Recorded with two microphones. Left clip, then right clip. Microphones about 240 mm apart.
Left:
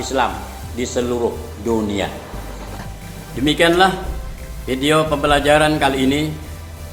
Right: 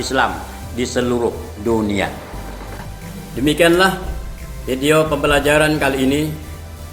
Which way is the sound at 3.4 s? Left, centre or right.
Centre.